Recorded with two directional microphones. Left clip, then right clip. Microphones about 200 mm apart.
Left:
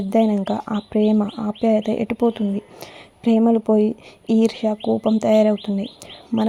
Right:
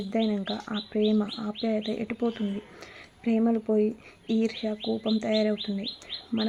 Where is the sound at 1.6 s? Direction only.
35° left (ahead or behind).